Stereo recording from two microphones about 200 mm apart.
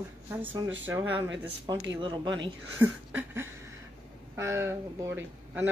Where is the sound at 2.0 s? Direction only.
25° right (ahead or behind).